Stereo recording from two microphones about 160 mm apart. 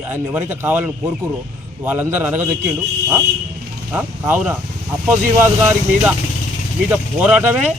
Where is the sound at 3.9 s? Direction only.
15° right (ahead or behind).